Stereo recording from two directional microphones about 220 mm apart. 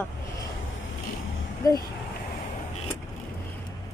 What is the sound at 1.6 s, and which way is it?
Speech, 15° left (ahead or behind).